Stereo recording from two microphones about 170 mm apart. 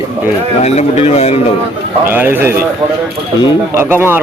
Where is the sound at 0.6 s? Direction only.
40° left (ahead or behind).